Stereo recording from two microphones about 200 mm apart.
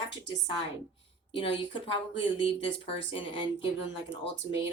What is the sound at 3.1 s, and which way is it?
A woman's voice, 25° left (ahead or behind).